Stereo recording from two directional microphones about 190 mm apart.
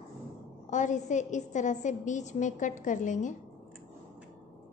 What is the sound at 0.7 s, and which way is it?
A woman's voice, 40° left (ahead or behind).